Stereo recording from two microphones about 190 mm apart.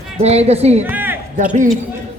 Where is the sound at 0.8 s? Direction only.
10° right (ahead or behind).